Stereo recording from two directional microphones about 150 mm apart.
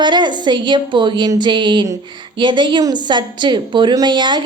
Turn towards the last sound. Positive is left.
turn(degrees=-30)  # may be behind; listen again after turning